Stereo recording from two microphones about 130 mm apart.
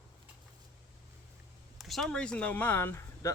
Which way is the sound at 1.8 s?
Centre (ahead or behind).